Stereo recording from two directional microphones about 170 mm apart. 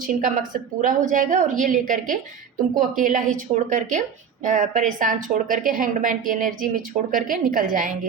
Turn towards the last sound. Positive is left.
turn(degrees=-55)  # may be behind; listen again after turning